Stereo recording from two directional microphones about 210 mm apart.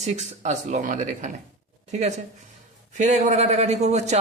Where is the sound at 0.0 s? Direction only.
35° right (ahead or behind).